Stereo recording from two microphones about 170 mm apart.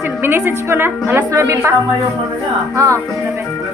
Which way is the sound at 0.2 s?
15° right (ahead or behind).